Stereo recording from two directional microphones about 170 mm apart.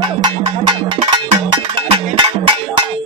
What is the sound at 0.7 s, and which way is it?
Music, 30° right (ahead or behind).